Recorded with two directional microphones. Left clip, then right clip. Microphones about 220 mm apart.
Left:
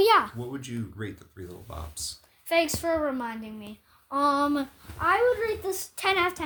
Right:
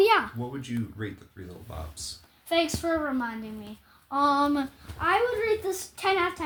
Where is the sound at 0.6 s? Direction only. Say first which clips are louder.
Right 2 dB; 55° left (ahead or behind).